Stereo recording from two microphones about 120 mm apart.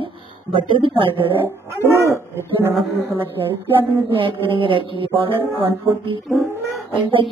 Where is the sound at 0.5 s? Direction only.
45° right (ahead or behind).